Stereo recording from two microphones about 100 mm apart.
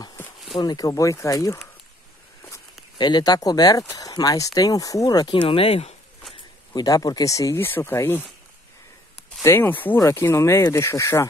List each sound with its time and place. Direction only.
0.6 s speech: 40° left (ahead or behind)
3.0 s speech: 45° left (ahead or behind)
5.3 s speech: 60° left (ahead or behind); by 5.9 s 90° left
6.7 s speech: 35° left (ahead or behind)
7.6 s speech: 20° left (ahead or behind)
9.4 s speech: 25° left (ahead or behind)